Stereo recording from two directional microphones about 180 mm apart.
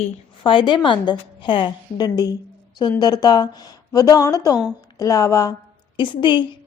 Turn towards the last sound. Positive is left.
turn(degrees=25)  # may be behind; listen again after turning